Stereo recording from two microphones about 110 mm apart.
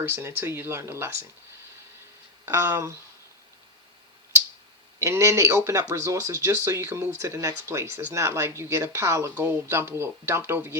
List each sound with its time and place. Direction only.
0.0 s speech: 25° right (ahead or behind)
2.5 s speech: 25° right (ahead or behind)
4.9 s speech: 25° right (ahead or behind)